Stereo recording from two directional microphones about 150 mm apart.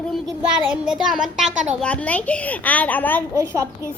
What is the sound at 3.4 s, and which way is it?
Speech, 20° right (ahead or behind).